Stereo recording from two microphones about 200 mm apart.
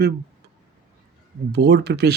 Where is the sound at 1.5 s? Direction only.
60° right (ahead or behind).